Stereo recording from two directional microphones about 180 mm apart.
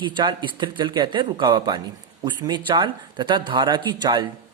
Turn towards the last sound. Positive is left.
turn(degrees=-25)  # may be behind; listen again after turning